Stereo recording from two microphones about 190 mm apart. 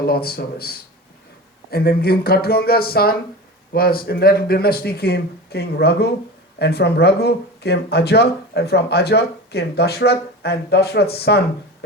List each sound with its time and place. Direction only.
0.0 s speech: 55° left (ahead or behind)